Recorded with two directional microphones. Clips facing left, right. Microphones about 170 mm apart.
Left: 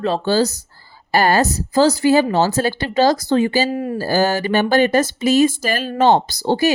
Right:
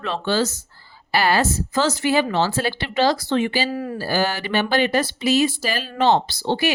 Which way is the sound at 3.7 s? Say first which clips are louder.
Left 4 dB; 25° left (ahead or behind).